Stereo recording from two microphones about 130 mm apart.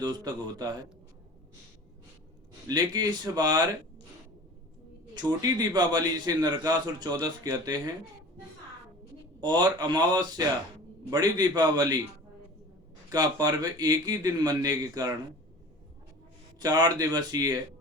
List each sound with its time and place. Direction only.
0.0 s a man's voice: 30° right (ahead or behind)
2.6 s a man's voice: 30° right (ahead or behind)
5.1 s a man's voice: 30° right (ahead or behind)
9.4 s a man's voice: 35° right (ahead or behind)
13.1 s a man's voice: 30° right (ahead or behind)
16.6 s a man's voice: 30° right (ahead or behind)